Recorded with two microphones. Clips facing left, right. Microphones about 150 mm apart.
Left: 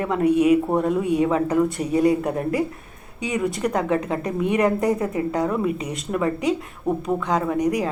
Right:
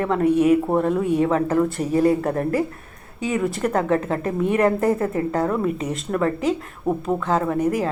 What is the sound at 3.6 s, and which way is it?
A woman's voice, 15° left (ahead or behind).